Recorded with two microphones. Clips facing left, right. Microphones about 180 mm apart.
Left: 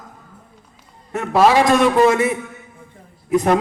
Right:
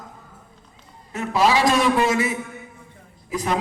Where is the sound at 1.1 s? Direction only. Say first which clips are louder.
Left 5 dB; 60° left (ahead or behind).